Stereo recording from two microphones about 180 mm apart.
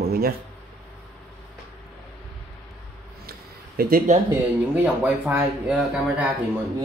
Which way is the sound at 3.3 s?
55° right (ahead or behind).